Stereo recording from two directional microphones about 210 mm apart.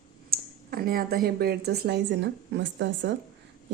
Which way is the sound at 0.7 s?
45° right (ahead or behind).